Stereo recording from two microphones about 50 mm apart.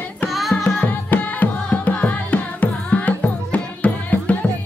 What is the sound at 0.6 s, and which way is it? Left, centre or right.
Music, left.